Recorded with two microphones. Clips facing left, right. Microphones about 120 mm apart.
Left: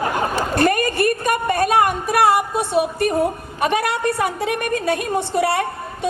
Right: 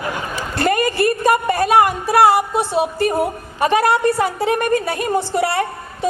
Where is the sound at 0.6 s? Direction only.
30° right (ahead or behind).